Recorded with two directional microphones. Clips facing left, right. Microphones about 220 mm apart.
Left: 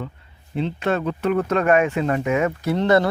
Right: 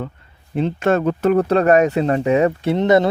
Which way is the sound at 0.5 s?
50° right (ahead or behind).